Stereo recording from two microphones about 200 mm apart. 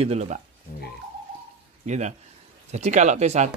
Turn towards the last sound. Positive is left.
turn(degrees=-35)  # may be behind; listen again after turning